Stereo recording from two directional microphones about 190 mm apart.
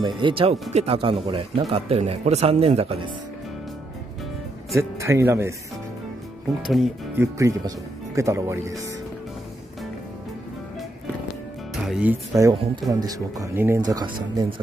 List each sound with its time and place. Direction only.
0.0 s speech: 25° right (ahead or behind)
4.7 s speech: 15° right (ahead or behind)
6.6 s speech: centre (ahead or behind)
7.2 s speech: 15° right (ahead or behind)
11.7 s speech: 5° right (ahead or behind); by 14.5 s 20° right (ahead or behind)